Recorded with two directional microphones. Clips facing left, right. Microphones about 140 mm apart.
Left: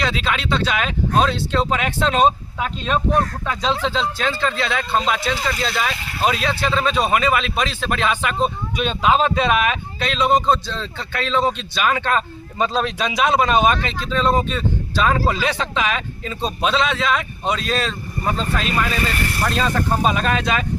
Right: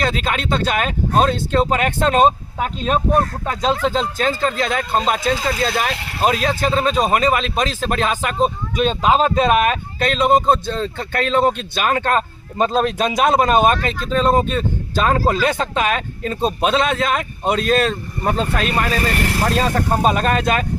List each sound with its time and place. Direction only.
0.0 s speech: 45° right (ahead or behind)
18.8 s speech: 40° right (ahead or behind)